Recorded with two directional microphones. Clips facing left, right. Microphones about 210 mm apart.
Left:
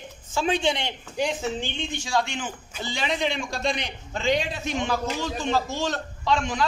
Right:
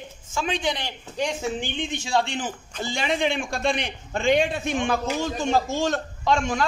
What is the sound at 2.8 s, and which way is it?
A man's voice, 50° right (ahead or behind).